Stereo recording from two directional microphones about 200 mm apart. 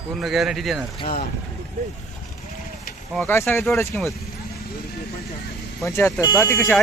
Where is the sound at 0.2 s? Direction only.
Centre (ahead or behind).